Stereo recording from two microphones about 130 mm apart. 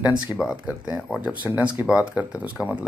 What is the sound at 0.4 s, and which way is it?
Speech, 5° right (ahead or behind).